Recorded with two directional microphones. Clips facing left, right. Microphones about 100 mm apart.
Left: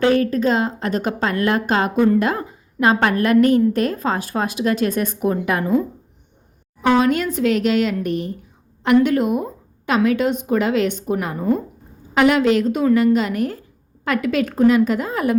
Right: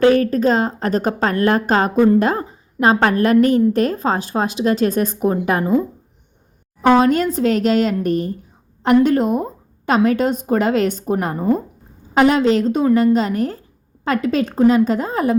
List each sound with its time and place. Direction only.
0.0 s a woman's voice: 40° right (ahead or behind)
6.8 s a woman's voice: 35° right (ahead or behind)